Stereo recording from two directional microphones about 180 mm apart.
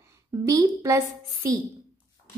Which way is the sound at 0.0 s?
20° right (ahead or behind).